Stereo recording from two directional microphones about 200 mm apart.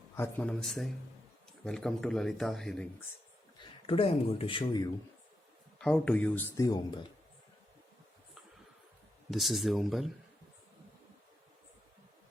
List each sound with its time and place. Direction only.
0.2 s a man's voice: 5° left (ahead or behind)
3.6 s speech: 25° left (ahead or behind)
5.8 s speech: 5° left (ahead or behind)
9.3 s a man's voice: centre (ahead or behind)